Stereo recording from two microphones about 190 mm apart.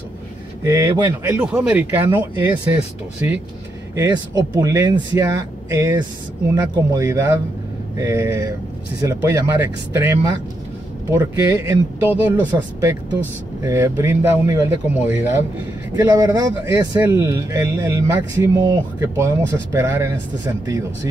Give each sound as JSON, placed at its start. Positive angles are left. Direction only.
{"t": 0.7, "sound": "speech", "side_deg": -15}
{"t": 13.6, "sound": "speech", "side_deg": -15}